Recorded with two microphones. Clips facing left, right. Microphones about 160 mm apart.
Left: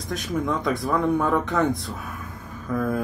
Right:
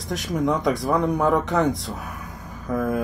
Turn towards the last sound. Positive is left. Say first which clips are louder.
# right 1 dB
turn(degrees=-20)  # may be behind; listen again after turning